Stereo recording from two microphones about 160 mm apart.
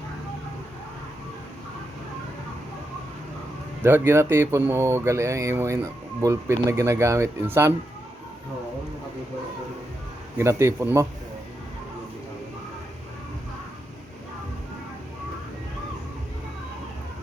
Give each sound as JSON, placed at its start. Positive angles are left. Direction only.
{"t": 3.8, "sound": "speech", "side_deg": -15}
{"t": 10.3, "sound": "speech", "side_deg": -15}